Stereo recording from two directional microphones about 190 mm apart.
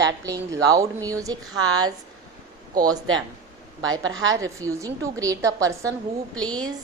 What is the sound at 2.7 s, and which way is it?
Speech, 20° right (ahead or behind).